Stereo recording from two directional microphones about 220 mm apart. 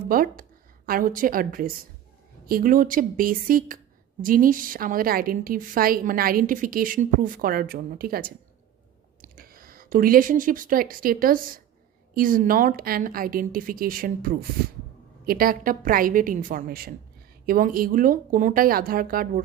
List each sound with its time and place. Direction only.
0.1 s a woman's voice: 40° right (ahead or behind)